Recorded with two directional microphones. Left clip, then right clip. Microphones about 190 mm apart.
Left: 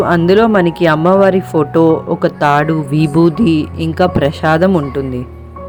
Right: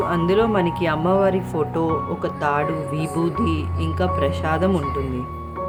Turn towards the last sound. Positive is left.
turn(degrees=35)  # may be behind; listen again after turning